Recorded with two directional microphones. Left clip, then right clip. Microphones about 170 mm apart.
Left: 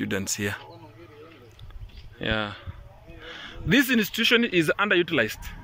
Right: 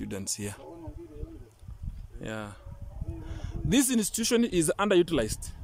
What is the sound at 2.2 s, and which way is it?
Speech, 5° right (ahead or behind).